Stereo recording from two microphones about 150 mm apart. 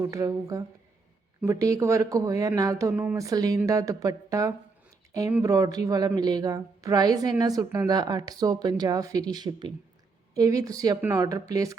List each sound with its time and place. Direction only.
0.0 s a woman's voice: 20° right (ahead or behind)